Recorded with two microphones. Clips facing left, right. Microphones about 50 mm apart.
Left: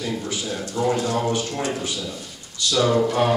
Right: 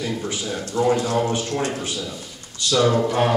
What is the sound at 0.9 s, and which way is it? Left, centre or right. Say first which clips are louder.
Music: right 1 dB; centre.